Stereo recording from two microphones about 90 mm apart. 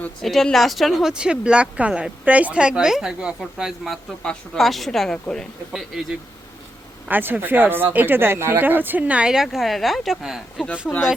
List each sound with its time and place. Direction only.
0.2 s speech: 5° left (ahead or behind)
4.2 s speech: 5° left (ahead or behind)
7.1 s speech: 20° right (ahead or behind); by 10.7 s centre (ahead or behind)